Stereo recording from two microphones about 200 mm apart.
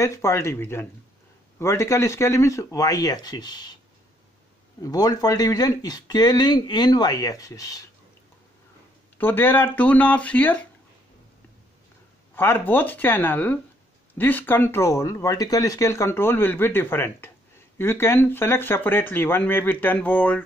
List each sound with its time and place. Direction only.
0.0 s speech: 15° left (ahead or behind)
4.8 s speech: 20° left (ahead or behind)
9.2 s speech: 10° left (ahead or behind)
12.4 s speech: 10° left (ahead or behind)